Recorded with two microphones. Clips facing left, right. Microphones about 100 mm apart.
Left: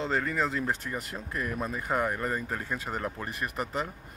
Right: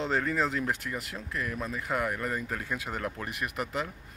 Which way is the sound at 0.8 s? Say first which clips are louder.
Left 1 dB; 15° left (ahead or behind).